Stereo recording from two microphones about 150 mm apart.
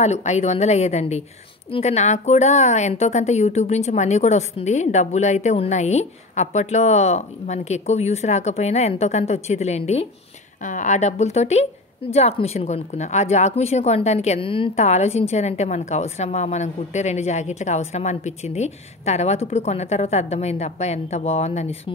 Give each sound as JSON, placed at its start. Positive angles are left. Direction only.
{"t": 0.0, "sound": "a woman's voice", "side_deg": 50}
{"t": 10.6, "sound": "a woman's voice", "side_deg": 55}